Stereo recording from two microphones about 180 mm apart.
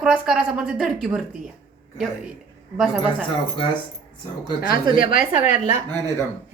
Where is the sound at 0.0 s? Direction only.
5° right (ahead or behind).